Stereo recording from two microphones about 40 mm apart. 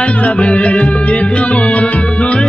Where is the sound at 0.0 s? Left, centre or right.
Left.